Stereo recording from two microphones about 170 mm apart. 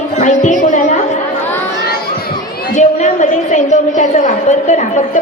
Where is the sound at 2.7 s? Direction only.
45° left (ahead or behind).